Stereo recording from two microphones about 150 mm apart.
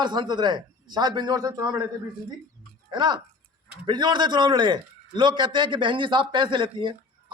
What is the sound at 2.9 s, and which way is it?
A man's voice, 30° right (ahead or behind).